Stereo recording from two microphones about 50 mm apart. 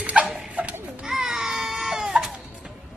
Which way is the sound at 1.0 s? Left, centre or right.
Centre.